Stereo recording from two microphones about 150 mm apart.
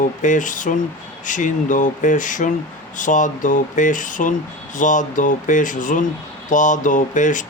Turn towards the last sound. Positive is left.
turn(degrees=55)  # may be behind; listen again after turning